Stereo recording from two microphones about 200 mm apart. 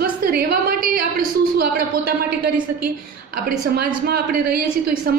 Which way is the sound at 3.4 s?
50° right (ahead or behind).